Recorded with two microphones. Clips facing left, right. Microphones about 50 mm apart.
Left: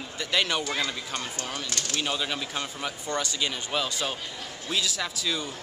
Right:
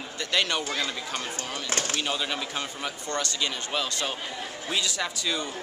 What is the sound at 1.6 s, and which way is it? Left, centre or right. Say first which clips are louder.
Speech: right 5 dB; right.